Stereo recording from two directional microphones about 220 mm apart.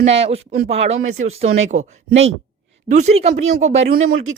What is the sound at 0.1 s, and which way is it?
Speech, 25° right (ahead or behind).